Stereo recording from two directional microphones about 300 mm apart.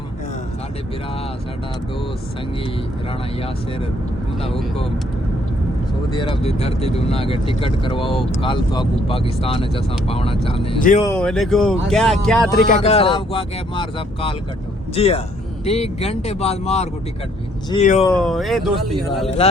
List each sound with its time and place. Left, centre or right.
4.4 s speech: centre
6.1 s speech: centre
11.0 s speech: centre
12.6 s speech: left
18.0 s speech: centre